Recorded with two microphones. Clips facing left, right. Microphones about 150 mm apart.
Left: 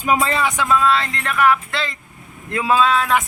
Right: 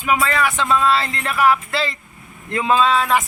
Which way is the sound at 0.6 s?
Centre (ahead or behind).